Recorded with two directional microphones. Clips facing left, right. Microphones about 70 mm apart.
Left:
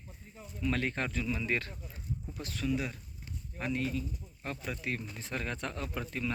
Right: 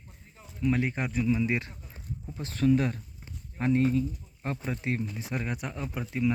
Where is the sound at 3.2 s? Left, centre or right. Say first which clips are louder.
Right 8 dB; right.